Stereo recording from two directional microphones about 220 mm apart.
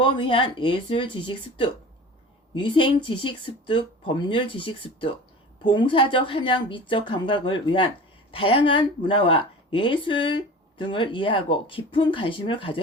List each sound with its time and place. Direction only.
0.0 s speech: 25° left (ahead or behind)